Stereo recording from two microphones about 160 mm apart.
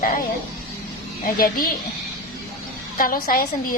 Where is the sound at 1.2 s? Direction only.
65° left (ahead or behind).